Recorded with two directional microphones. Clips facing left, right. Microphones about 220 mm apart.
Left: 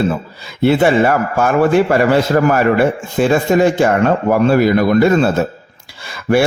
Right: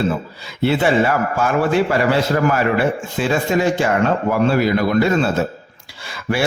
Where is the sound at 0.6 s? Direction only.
50° left (ahead or behind).